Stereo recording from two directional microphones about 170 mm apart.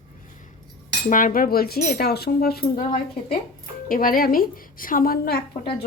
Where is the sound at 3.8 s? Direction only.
55° left (ahead or behind).